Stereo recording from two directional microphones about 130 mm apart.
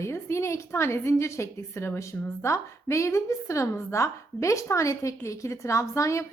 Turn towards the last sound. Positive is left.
turn(degrees=25)  # may be behind; listen again after turning